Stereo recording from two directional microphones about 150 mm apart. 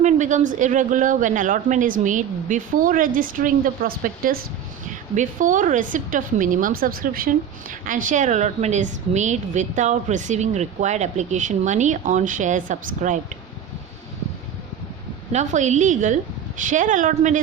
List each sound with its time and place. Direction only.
0.0 s a woman's voice: 55° right (ahead or behind); by 4.4 s 75° right (ahead or behind)
5.1 s a woman's voice: 60° right (ahead or behind)
15.3 s a woman's voice: 50° right (ahead or behind)